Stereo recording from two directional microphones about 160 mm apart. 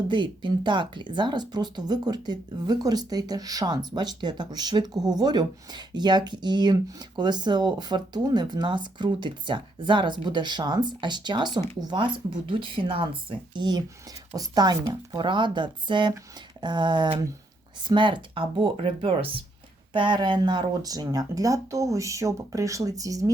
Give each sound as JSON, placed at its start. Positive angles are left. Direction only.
{"t": 0.1, "sound": "speech", "side_deg": -30}